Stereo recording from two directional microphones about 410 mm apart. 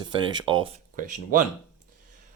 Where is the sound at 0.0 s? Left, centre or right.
Centre.